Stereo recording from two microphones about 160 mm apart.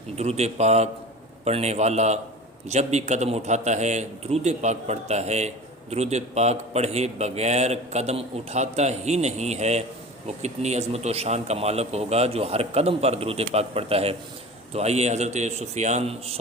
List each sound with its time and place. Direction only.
0.2 s a man's voice: 40° right (ahead or behind)